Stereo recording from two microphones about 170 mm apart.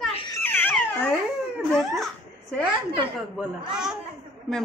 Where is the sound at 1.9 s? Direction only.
Centre (ahead or behind).